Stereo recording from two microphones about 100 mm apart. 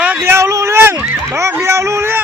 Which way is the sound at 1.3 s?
30° right (ahead or behind).